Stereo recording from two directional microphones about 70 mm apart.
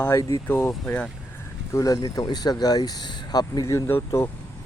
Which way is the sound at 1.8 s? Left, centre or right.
Left.